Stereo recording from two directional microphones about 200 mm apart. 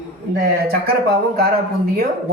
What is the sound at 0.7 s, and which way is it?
Speech, 50° right (ahead or behind).